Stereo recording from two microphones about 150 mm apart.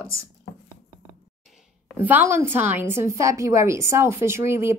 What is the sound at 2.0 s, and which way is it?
A woman's voice, 15° right (ahead or behind).